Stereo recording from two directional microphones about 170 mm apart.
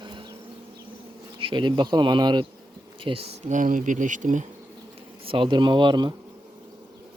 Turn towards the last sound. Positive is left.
turn(degrees=-25)  # may be behind; listen again after turning